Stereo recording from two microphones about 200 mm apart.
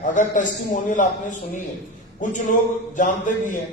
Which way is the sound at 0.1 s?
40° left (ahead or behind).